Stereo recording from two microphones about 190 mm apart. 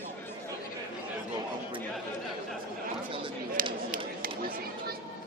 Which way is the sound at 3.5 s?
50° right (ahead or behind).